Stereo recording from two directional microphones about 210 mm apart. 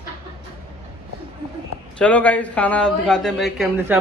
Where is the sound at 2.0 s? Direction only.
5° left (ahead or behind).